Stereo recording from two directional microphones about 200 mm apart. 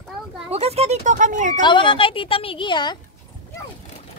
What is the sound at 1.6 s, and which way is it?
Speech, 25° left (ahead or behind).